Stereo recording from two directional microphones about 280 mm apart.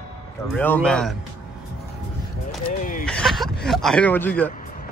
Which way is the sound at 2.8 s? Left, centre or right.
Left.